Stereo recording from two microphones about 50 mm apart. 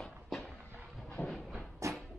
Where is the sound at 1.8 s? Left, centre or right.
Right.